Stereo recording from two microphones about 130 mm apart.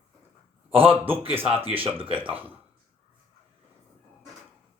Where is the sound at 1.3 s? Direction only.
45° right (ahead or behind).